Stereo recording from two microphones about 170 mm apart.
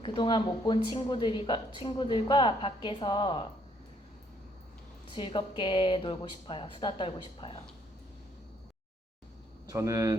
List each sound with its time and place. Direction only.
0.0 s a woman's voice: 30° left (ahead or behind)
5.1 s a woman's voice: 30° left (ahead or behind)
9.6 s speech: 20° right (ahead or behind)